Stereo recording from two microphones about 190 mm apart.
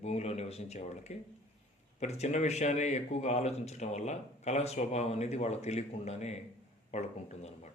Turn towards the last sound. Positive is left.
turn(degrees=35)  # may be behind; listen again after turning